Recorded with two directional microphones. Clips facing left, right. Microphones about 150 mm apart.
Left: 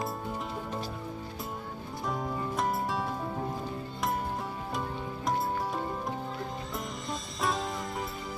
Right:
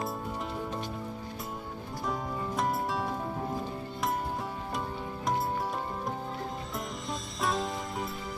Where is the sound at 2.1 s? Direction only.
Centre (ahead or behind).